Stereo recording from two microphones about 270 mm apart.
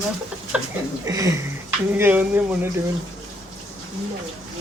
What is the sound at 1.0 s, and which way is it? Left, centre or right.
Speech, centre.